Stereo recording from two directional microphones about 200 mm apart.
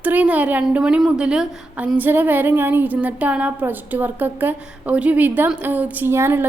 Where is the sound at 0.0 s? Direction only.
5° right (ahead or behind).